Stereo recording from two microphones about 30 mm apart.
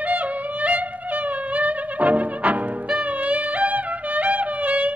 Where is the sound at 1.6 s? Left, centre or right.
Right.